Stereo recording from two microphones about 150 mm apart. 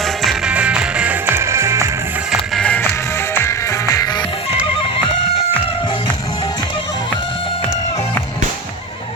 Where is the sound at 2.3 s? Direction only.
5° left (ahead or behind).